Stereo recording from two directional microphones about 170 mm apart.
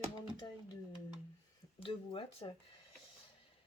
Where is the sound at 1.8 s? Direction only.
30° left (ahead or behind).